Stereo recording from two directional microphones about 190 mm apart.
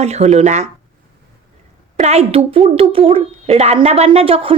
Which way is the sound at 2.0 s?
35° right (ahead or behind).